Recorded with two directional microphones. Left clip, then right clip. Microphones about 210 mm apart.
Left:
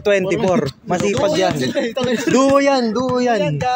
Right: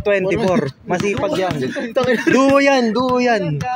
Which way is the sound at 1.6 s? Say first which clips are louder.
Left 3 dB; 35° left (ahead or behind).